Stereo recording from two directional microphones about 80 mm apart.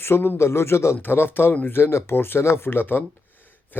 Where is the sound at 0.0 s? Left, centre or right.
Left.